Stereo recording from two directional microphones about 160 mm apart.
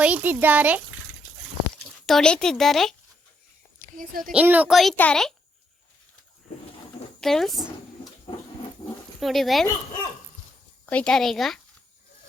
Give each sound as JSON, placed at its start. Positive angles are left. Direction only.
{"t": 0.0, "sound": "speech", "side_deg": -10}
{"t": 2.0, "sound": "speech", "side_deg": 5}
{"t": 3.9, "sound": "a woman's voice", "side_deg": -60}
{"t": 4.3, "sound": "speech", "side_deg": -10}
{"t": 7.2, "sound": "speech", "side_deg": 0}
{"t": 9.2, "sound": "speech", "side_deg": 0}
{"t": 10.8, "sound": "speech", "side_deg": 5}